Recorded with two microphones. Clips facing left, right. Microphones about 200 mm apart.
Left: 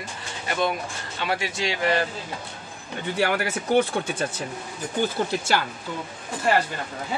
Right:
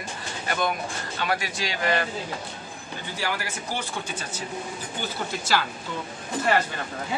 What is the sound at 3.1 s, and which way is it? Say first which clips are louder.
Speech: left 7 dB; 60° left (ahead or behind).